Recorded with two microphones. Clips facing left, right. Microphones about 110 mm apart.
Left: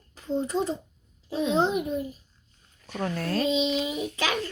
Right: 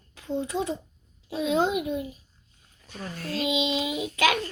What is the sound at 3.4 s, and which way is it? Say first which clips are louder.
Child singing: even; 15° right (ahead or behind).